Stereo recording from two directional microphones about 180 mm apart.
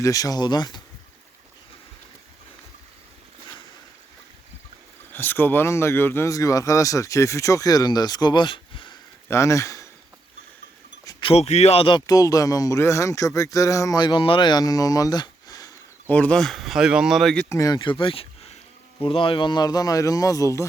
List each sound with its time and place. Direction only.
0.0 s speech: 20° left (ahead or behind)
5.1 s speech: 10° left (ahead or behind); by 9.0 s 30° left (ahead or behind)
9.3 s speech: 15° left (ahead or behind)
11.0 s speech: 25° left (ahead or behind)
16.0 s speech: 5° left (ahead or behind)
17.5 s speech: 20° left (ahead or behind)